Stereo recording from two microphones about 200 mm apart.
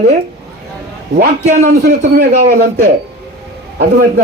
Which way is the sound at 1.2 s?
40° right (ahead or behind).